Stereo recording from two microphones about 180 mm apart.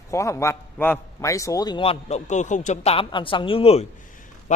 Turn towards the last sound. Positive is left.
turn(degrees=35)  # may be behind; listen again after turning